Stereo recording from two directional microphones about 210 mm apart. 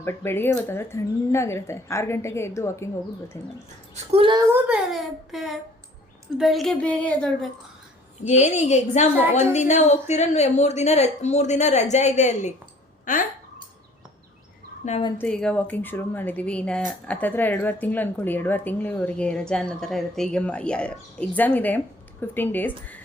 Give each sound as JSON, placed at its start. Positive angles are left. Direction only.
{"t": 0.0, "sound": "speech", "side_deg": 10}
{"t": 3.9, "sound": "speech", "side_deg": -25}
{"t": 4.5, "sound": "a woman's voice", "side_deg": -5}
{"t": 8.3, "sound": "a woman's voice", "side_deg": 35}
{"t": 14.8, "sound": "speech", "side_deg": 30}
{"t": 15.2, "sound": "speech", "side_deg": 5}